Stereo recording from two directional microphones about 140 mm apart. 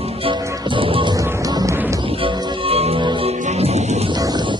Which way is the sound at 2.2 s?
45° right (ahead or behind).